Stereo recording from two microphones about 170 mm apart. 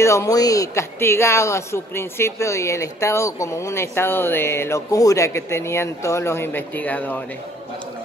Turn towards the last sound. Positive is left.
turn(degrees=10)  # may be behind; listen again after turning